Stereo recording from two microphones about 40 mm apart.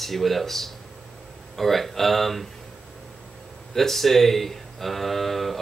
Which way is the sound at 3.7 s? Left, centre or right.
Centre.